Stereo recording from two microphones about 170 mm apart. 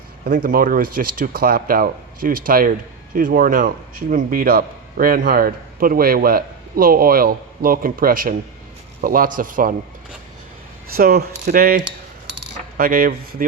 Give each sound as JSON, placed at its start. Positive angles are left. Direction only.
{"t": 0.3, "sound": "a man's voice", "side_deg": -55}
{"t": 10.9, "sound": "a man's voice", "side_deg": -60}